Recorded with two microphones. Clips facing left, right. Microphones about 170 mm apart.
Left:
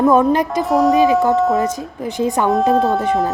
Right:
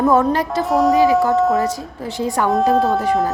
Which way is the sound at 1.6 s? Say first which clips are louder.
Left 1 dB; 20° left (ahead or behind).